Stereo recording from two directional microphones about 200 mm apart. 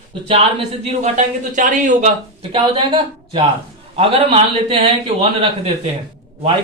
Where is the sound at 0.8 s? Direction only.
35° right (ahead or behind).